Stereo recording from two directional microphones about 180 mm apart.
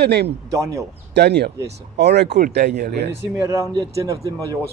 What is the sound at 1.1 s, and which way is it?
Speech, 65° right (ahead or behind).